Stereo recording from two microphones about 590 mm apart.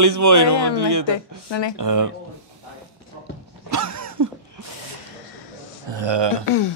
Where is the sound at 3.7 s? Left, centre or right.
Right.